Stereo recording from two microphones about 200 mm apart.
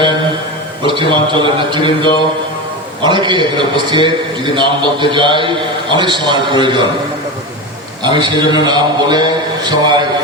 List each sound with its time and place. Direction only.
0.9 s a man's voice: 25° right (ahead or behind)
8.0 s a man's voice: 25° right (ahead or behind)